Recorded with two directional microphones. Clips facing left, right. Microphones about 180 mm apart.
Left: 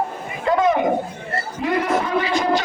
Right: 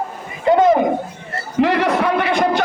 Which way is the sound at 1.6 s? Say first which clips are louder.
Right 4 dB; 75° right (ahead or behind).